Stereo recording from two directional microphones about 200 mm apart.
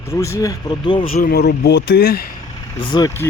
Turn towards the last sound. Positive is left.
turn(degrees=15)  # may be behind; listen again after turning